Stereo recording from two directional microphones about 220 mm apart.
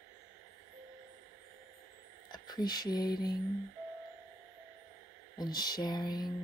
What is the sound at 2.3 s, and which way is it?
Speech, 20° left (ahead or behind).